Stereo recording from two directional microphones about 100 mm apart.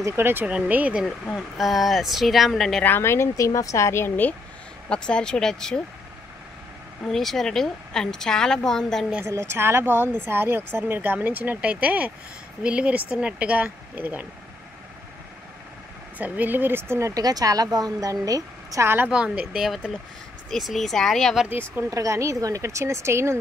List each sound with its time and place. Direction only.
0.0 s speech: 25° right (ahead or behind)
1.3 s a woman's voice: centre (ahead or behind)
2.8 s a woman's voice: 20° left (ahead or behind)
4.8 s speech: 10° left (ahead or behind)
7.1 s a woman's voice: 5° left (ahead or behind)
9.2 s a woman's voice: 30° right (ahead or behind)
16.2 s a woman's voice: 15° right (ahead or behind)
17.1 s a woman's voice: 40° right (ahead or behind)
19.0 s a woman's voice: 10° right (ahead or behind)
21.5 s a woman's voice: 20° right (ahead or behind)
21.9 s a woman's voice: 35° right (ahead or behind)